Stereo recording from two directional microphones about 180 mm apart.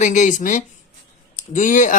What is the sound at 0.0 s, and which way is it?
Speech, 40° left (ahead or behind).